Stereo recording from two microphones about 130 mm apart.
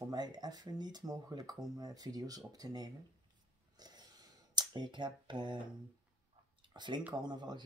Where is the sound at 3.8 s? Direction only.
30° right (ahead or behind).